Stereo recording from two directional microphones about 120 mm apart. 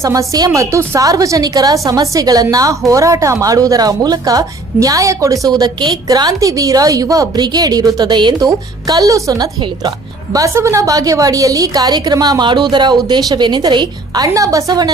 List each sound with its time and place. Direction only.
0.0 s a woman's voice: 25° right (ahead or behind)